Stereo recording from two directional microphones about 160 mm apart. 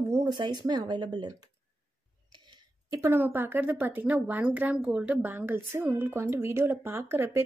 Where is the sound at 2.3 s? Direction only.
30° right (ahead or behind).